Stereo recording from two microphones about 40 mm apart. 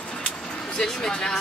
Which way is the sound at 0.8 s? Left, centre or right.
Centre.